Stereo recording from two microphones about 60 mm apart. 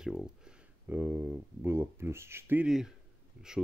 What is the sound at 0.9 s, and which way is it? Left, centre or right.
Speech, right.